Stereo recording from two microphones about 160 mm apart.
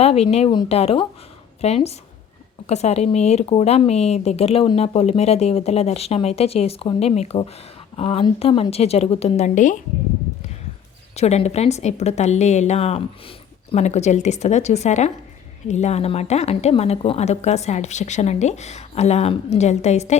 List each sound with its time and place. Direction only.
0.0 s speech: 40° left (ahead or behind)
11.1 s a woman's voice: 40° left (ahead or behind)